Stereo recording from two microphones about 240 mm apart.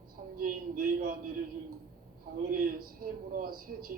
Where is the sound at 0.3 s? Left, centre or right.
Right.